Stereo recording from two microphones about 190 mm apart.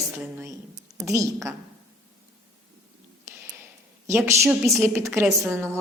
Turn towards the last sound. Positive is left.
turn(degrees=-15)  # may be behind; listen again after turning